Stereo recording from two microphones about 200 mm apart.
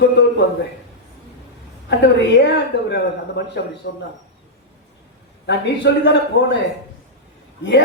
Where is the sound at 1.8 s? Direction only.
60° left (ahead or behind).